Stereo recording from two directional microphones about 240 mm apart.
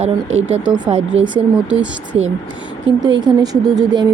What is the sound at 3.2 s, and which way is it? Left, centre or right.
Speech, centre.